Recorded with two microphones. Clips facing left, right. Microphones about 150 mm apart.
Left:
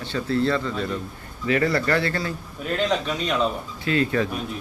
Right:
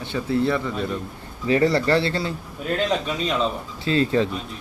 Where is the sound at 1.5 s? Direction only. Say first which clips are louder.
Right 3 dB; 30° right (ahead or behind).